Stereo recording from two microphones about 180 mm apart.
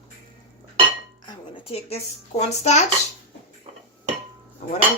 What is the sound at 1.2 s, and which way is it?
Speech, 35° left (ahead or behind).